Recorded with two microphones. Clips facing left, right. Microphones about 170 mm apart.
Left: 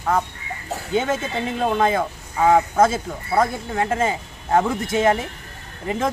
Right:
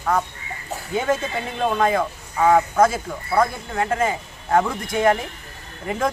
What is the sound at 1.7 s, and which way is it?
Speech, 25° left (ahead or behind).